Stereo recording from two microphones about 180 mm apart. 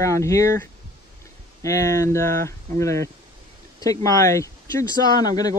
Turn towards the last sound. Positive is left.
turn(degrees=20)  # may be behind; listen again after turning